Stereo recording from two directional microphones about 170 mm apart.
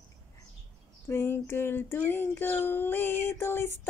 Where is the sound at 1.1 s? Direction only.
15° left (ahead or behind).